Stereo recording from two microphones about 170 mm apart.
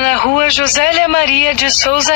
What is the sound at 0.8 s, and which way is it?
Speech, 85° left.